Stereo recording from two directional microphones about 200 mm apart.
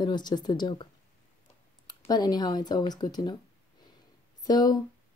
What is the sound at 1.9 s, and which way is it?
Speech, 20° left (ahead or behind).